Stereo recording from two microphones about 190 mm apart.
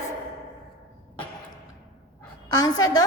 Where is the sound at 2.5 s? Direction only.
20° left (ahead or behind).